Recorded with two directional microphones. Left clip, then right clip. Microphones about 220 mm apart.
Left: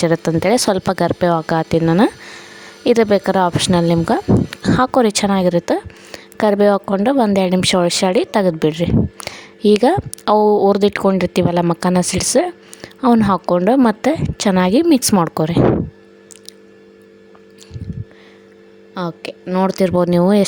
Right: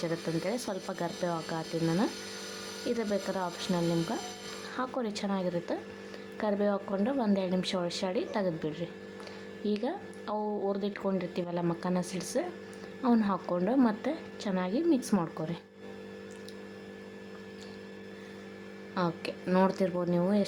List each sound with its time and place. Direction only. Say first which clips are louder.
0.0 s speech: left 17 dB; 50° left (ahead or behind)
18.9 s speech: left 8 dB; 30° left (ahead or behind)